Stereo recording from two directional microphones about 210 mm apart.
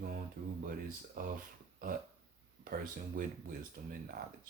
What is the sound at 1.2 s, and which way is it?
Speech, 40° right (ahead or behind).